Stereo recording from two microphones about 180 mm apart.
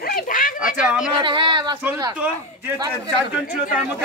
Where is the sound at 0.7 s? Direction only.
5° right (ahead or behind).